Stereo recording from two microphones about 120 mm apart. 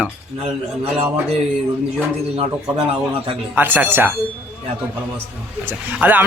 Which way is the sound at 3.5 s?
15° right (ahead or behind).